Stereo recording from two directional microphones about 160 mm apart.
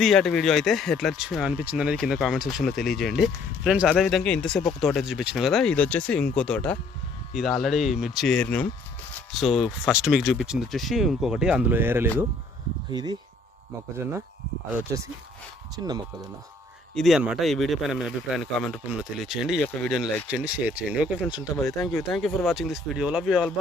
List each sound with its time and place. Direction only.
0.0 s speech: centre (ahead or behind)
12.9 s speech: 25° right (ahead or behind)
15.7 s speech: 25° right (ahead or behind)
16.9 s speech: centre (ahead or behind)